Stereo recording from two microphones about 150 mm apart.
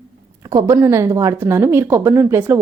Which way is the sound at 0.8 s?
20° right (ahead or behind).